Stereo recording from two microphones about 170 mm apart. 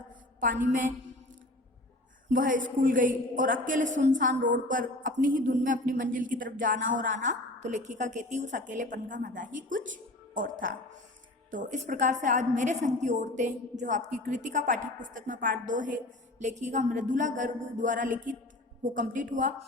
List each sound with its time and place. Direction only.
0.6 s a woman's voice: 50° right (ahead or behind)
2.3 s a woman's voice: 50° right (ahead or behind)